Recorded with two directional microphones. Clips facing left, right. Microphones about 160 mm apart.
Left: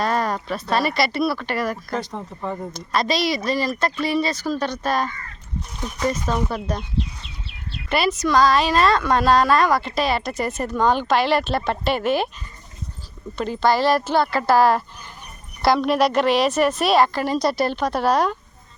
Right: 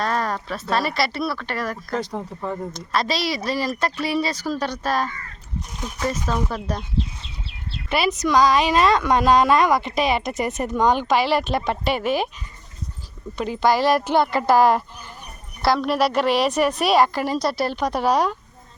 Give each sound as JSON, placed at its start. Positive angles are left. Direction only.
{"t": 0.0, "sound": "a woman's voice", "side_deg": 5}
{"t": 7.9, "sound": "a woman's voice", "side_deg": -10}
{"t": 13.3, "sound": "a woman's voice", "side_deg": -10}
{"t": 15.6, "sound": "a woman's voice", "side_deg": 0}